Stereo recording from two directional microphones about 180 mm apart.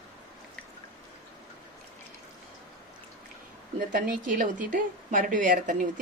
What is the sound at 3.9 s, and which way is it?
A woman's voice, 50° right (ahead or behind).